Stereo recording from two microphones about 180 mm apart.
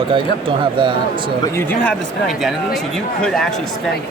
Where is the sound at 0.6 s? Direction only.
25° right (ahead or behind).